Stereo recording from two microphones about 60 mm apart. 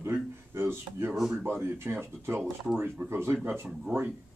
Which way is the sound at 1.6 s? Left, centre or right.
Right.